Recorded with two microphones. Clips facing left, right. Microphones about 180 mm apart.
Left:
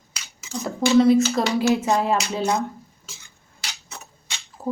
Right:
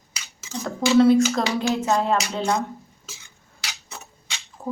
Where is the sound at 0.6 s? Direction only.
Centre (ahead or behind).